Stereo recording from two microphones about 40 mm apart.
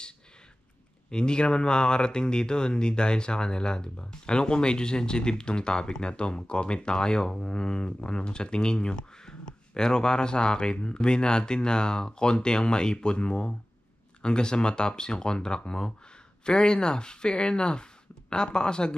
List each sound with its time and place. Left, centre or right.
1.1 s speech: left